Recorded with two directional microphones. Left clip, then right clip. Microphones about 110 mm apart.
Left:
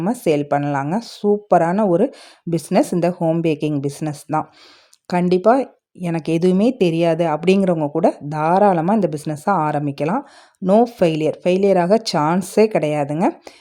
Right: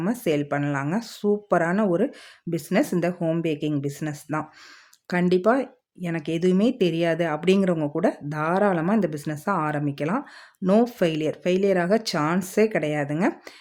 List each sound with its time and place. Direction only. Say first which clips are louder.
0.0 s speech: left 6 dB; 35° left (ahead or behind)
3.4 s speech: left 6 dB; 40° left (ahead or behind)
10.6 s speech: left 6 dB; 15° left (ahead or behind)
10.8 s speech: left 6 dB; 30° left (ahead or behind)